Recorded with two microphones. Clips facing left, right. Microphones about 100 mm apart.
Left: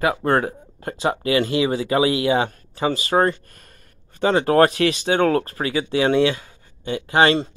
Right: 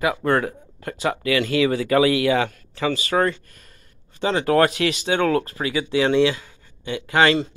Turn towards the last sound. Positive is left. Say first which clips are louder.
# left 1 dB
turn(degrees=35)  # may be behind; listen again after turning